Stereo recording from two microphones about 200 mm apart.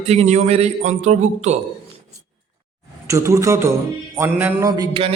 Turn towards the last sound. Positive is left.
turn(degrees=-20)  # may be behind; listen again after turning